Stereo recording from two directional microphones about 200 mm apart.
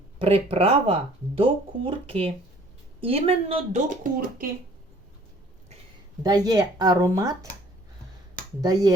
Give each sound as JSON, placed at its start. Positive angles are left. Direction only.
{"t": 0.2, "sound": "speech", "side_deg": -30}
{"t": 6.2, "sound": "speech", "side_deg": -20}
{"t": 8.6, "sound": "speech", "side_deg": -20}